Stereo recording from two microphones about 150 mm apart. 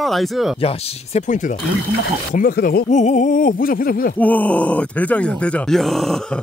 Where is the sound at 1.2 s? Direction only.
55° left (ahead or behind).